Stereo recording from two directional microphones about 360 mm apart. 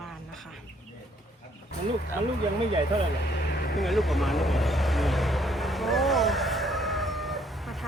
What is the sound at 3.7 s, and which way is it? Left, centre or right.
Vehicle, centre.